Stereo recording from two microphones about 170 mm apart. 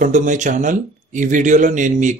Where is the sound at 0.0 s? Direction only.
50° right (ahead or behind).